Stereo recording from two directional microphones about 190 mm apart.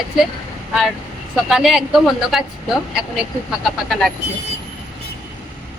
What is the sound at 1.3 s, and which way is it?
A woman's voice, centre (ahead or behind).